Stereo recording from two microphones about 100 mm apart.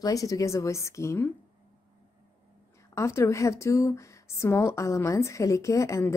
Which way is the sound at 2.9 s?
30° left (ahead or behind).